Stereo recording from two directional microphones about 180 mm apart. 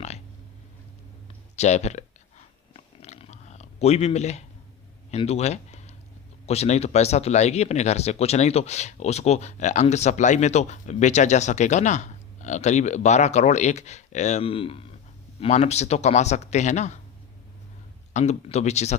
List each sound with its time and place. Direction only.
1.5 s speech: 40° left (ahead or behind)
2.7 s chewing: 35° left (ahead or behind)
5.1 s speech: 35° left (ahead or behind)
18.1 s speech: 40° left (ahead or behind)